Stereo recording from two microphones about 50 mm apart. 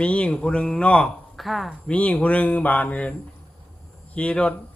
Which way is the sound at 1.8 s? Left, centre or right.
Left.